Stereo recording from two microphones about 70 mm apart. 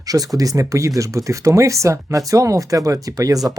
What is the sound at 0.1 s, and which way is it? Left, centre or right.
Speech, right.